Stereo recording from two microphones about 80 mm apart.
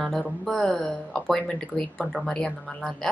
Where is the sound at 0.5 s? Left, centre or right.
Centre.